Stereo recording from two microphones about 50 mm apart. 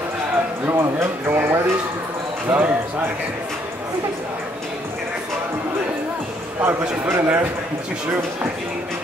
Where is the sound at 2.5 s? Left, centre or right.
Right.